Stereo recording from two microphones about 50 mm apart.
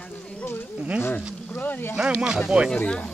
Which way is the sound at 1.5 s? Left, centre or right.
Left.